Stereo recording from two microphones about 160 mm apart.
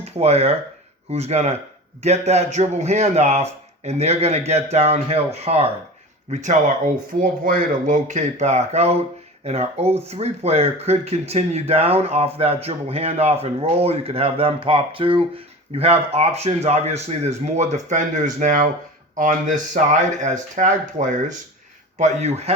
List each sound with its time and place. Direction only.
0.0 s speech: 40° right (ahead or behind)